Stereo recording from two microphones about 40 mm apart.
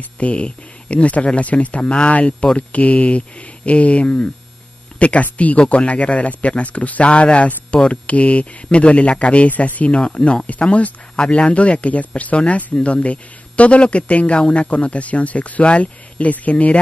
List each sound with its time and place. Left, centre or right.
0.2 s speech: left
4.9 s a sound: left
5.2 s speech: left